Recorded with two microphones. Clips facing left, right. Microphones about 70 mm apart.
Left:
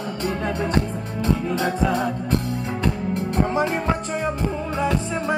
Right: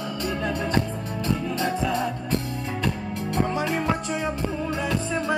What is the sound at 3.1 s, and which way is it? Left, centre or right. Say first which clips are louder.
Music: left 3 dB; left.